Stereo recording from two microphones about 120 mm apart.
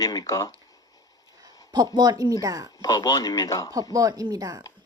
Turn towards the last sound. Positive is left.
turn(degrees=-30)  # may be behind; listen again after turning